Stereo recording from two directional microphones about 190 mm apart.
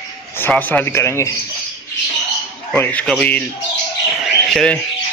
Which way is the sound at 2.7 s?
10° left (ahead or behind).